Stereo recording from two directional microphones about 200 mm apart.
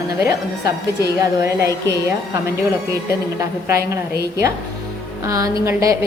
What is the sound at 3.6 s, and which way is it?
A woman's voice, 15° right (ahead or behind).